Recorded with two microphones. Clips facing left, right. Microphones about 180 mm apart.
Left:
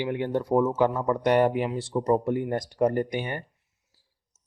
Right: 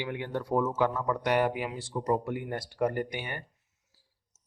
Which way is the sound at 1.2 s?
30° left (ahead or behind).